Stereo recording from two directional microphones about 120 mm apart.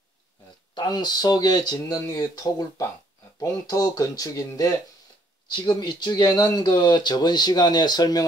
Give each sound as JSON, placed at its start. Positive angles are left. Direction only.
{"t": 0.7, "sound": "speech", "side_deg": 35}